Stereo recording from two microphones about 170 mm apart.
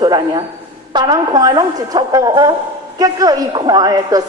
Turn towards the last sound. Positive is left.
turn(degrees=-20)  # may be behind; listen again after turning